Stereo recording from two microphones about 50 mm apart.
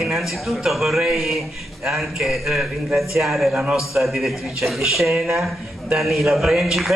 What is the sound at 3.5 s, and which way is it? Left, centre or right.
Speech, right.